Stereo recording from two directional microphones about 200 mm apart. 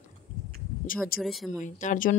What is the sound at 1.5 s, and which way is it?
Speech, 40° left (ahead or behind).